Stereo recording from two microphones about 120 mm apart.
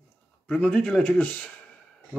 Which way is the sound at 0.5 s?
10° left (ahead or behind).